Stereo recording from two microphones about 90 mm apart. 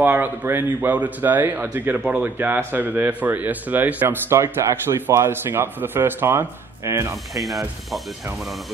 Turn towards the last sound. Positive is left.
turn(degrees=0)  # may be behind; listen again after turning